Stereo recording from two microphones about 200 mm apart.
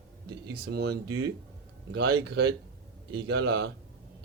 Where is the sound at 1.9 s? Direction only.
75° right (ahead or behind).